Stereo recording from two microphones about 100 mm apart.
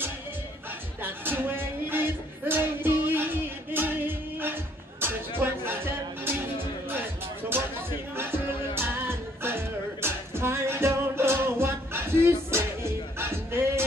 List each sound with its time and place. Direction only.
1.0 s music: 20° right (ahead or behind)
6.9 s music: 20° right (ahead or behind)